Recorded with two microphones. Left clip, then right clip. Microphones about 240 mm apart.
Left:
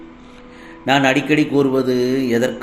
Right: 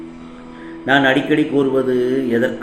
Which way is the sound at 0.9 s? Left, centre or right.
Left.